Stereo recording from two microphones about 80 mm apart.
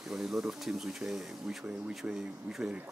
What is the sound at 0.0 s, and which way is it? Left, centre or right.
A man's voice, centre.